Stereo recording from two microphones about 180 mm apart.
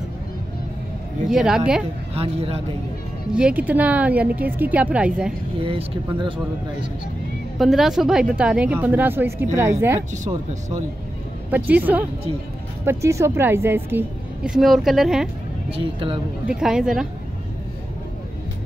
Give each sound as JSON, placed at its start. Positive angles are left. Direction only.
{"t": 1.3, "sound": "speech", "side_deg": -5}
{"t": 2.1, "sound": "speech", "side_deg": -35}
{"t": 3.3, "sound": "a woman's voice", "side_deg": -5}
{"t": 5.6, "sound": "speech", "side_deg": -30}
{"t": 7.5, "sound": "a woman's voice", "side_deg": 0}
{"t": 11.5, "sound": "a woman's voice", "side_deg": -10}
{"t": 15.8, "sound": "speech", "side_deg": -30}
{"t": 16.5, "sound": "speech", "side_deg": -5}